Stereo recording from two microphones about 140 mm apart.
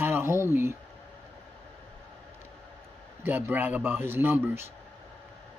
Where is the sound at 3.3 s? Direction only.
15° right (ahead or behind).